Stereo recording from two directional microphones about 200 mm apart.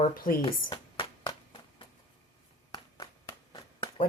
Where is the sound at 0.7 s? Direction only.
25° left (ahead or behind).